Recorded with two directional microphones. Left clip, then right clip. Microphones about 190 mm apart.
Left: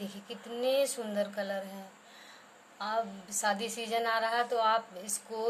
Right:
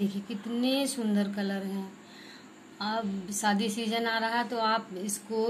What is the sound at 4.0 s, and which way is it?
Speech, 10° left (ahead or behind).